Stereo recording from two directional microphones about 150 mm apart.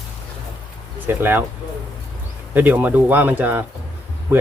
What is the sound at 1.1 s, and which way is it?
Speech, 15° right (ahead or behind).